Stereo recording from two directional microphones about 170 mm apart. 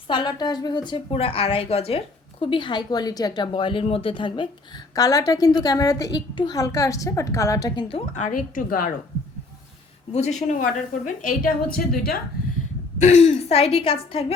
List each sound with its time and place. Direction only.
0.1 s speech: 25° left (ahead or behind)
7.9 s speech: 40° left (ahead or behind); by 8.9 s 55° left (ahead or behind)
10.1 s a woman's voice: 40° left (ahead or behind)
10.6 s a woman's voice: 50° left (ahead or behind)
13.0 s a woman's voice: 40° left (ahead or behind)